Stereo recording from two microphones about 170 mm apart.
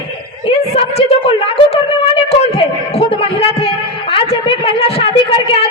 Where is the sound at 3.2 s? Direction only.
35° left (ahead or behind).